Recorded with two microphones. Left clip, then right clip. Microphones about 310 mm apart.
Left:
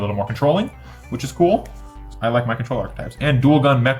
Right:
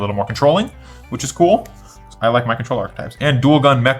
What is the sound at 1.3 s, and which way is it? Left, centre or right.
Speech, right.